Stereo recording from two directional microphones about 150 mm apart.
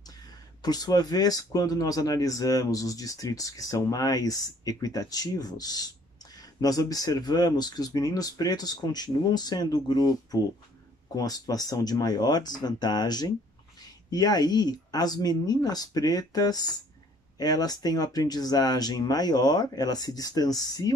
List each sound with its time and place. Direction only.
0.6 s speech: 25° left (ahead or behind)